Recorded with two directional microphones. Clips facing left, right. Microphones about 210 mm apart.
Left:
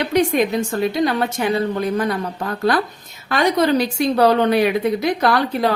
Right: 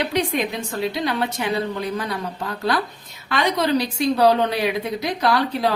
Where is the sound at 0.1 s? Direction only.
45° left (ahead or behind).